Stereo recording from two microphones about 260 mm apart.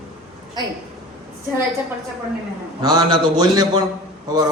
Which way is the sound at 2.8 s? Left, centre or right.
Centre.